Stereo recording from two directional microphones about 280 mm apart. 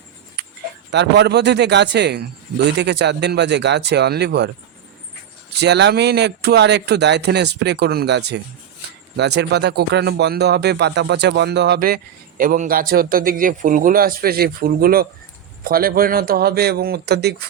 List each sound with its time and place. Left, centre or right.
0.4 s a sound: right
0.9 s speech: right
5.5 s speech: right